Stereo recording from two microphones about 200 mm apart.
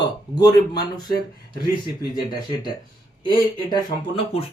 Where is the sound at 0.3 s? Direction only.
20° left (ahead or behind).